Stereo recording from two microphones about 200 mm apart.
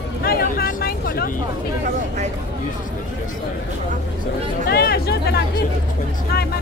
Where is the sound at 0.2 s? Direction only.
50° left (ahead or behind).